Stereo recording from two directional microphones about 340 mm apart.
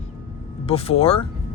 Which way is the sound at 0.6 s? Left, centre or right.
Centre.